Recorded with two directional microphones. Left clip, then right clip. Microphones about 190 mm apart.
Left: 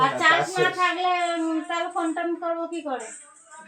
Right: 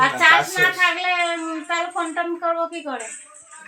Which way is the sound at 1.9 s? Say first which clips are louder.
Right 2 dB; 10° right (ahead or behind).